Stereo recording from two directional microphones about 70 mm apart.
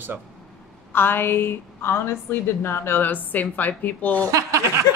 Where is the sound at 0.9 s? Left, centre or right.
Left.